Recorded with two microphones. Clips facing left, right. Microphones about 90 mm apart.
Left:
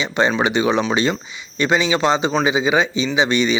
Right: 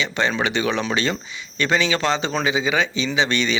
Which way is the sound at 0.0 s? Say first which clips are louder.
Left 4 dB; 20° left (ahead or behind).